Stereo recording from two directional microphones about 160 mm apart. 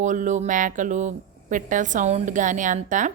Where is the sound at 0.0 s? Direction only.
50° right (ahead or behind).